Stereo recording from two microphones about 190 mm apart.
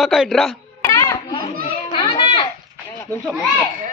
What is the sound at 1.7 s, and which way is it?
Children playing, 25° left (ahead or behind).